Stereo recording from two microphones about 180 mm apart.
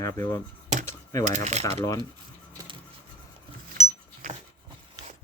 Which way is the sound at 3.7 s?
40° right (ahead or behind).